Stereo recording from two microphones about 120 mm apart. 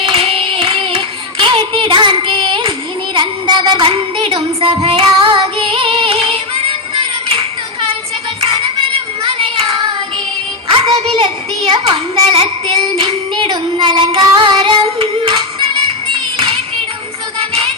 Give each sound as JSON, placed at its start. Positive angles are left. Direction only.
{"t": 0.1, "sound": "child singing", "side_deg": -50}
{"t": 3.2, "sound": "music", "side_deg": -40}
{"t": 8.4, "sound": "child singing", "side_deg": -50}
{"t": 10.9, "sound": "child singing", "side_deg": -50}